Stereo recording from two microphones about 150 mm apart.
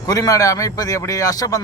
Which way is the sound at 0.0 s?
25° left (ahead or behind).